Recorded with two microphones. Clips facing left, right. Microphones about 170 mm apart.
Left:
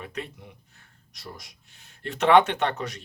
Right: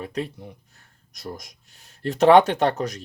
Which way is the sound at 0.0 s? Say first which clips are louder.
Right 6 dB; 35° right (ahead or behind).